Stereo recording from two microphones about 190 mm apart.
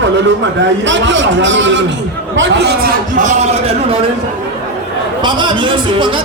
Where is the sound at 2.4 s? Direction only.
65° right (ahead or behind).